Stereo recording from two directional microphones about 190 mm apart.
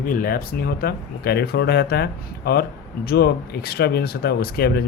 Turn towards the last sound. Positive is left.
turn(degrees=55)  # may be behind; listen again after turning